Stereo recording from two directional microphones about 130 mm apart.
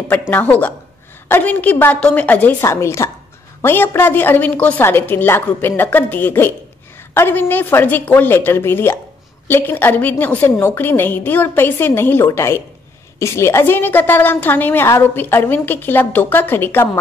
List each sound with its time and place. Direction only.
0.3 s a woman's voice: 15° left (ahead or behind)